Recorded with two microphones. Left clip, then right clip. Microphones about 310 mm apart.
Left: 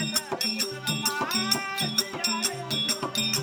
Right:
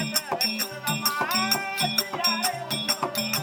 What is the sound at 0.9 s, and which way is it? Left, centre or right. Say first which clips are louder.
Music: right 3 dB; centre.